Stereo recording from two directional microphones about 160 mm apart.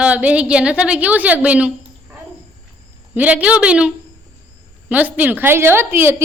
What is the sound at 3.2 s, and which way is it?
A woman's voice, 10° right (ahead or behind).